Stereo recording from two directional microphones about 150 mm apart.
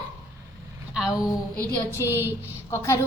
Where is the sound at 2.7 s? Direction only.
20° left (ahead or behind).